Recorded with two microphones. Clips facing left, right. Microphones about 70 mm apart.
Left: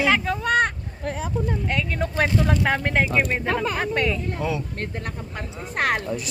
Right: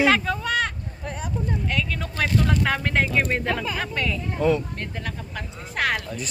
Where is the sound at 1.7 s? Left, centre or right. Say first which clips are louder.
Left 2 dB; left.